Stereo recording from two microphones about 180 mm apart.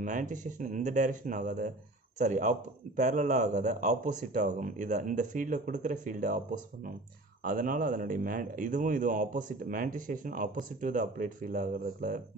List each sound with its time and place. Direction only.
0.0 s a man's voice: 45° right (ahead or behind)